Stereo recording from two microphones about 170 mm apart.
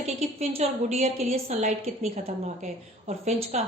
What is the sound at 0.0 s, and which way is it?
A woman's voice, 40° right (ahead or behind).